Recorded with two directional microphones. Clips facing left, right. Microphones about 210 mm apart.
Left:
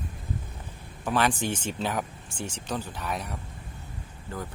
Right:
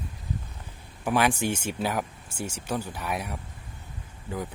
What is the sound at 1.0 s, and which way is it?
Speech, 10° right (ahead or behind).